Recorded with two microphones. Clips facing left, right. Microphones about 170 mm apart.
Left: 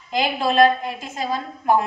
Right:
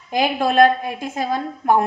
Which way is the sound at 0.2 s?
50° right (ahead or behind).